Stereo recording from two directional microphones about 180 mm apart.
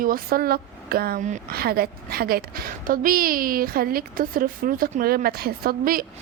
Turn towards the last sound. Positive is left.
turn(degrees=-50)  # may be behind; listen again after turning